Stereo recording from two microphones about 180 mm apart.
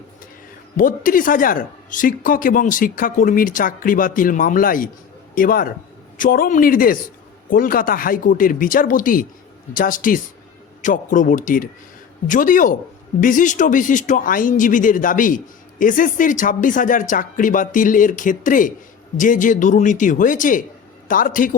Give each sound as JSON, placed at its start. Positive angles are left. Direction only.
{"t": 0.8, "sound": "speech", "side_deg": 50}